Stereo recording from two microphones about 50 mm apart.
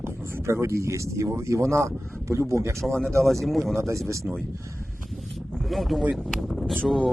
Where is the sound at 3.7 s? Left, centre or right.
Right.